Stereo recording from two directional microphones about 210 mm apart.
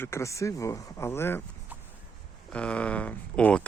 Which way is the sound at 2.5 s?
5° left (ahead or behind).